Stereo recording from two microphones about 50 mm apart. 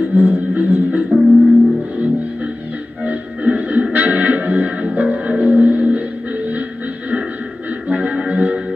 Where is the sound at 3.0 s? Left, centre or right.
Right.